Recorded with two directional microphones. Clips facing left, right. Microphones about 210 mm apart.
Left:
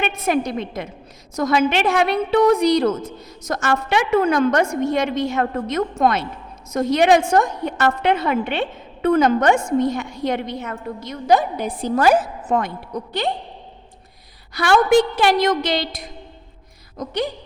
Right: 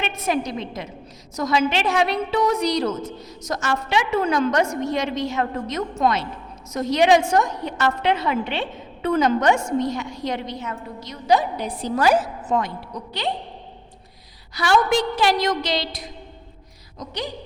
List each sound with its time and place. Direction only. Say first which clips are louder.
0.0 s a woman's voice: left 3 dB; 55° left (ahead or behind)
14.5 s a woman's voice: left 5 dB; 55° left (ahead or behind)